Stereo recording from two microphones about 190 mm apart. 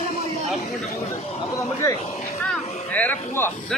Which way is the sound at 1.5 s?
15° left (ahead or behind).